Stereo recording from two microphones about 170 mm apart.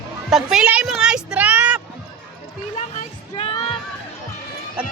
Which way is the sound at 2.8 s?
35° left (ahead or behind).